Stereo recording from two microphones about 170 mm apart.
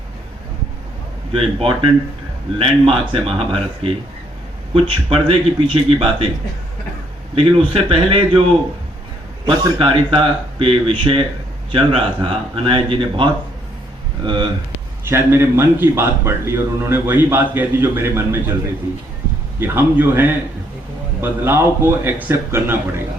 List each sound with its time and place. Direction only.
1.3 s speech: 30° right (ahead or behind)
4.7 s speech: 30° right (ahead or behind)
7.3 s speech: 30° right (ahead or behind)
9.5 s speech: 25° right (ahead or behind)
15.0 s a man's voice: 15° right (ahead or behind)
19.5 s a man's voice: 15° right (ahead or behind)